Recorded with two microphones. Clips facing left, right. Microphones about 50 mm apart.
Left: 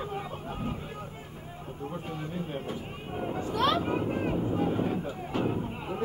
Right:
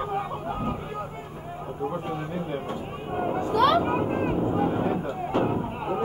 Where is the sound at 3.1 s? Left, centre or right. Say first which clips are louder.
Right 6 dB; centre.